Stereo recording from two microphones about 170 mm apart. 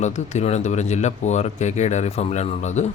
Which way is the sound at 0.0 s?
45° left (ahead or behind).